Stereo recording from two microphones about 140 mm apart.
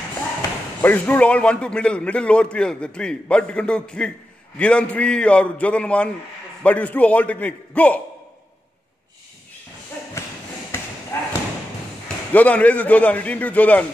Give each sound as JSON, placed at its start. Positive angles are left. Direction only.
{"t": 0.7, "sound": "a man's voice", "side_deg": 10}
{"t": 10.7, "sound": "basketball bounce", "side_deg": 15}
{"t": 12.3, "sound": "a man's voice", "side_deg": 10}